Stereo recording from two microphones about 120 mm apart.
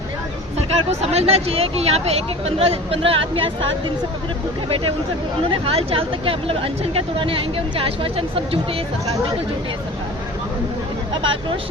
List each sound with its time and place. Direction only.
0.7 s speech: 60° right (ahead or behind)
4.7 s speech: 50° right (ahead or behind)